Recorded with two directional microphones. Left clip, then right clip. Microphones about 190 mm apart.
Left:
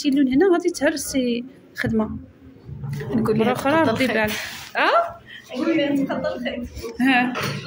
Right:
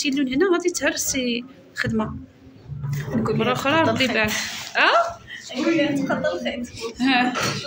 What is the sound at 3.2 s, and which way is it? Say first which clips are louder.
Speech: left 1 dB; 25° left (ahead or behind).